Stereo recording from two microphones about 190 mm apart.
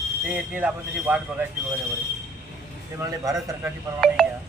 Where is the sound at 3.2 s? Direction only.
15° right (ahead or behind).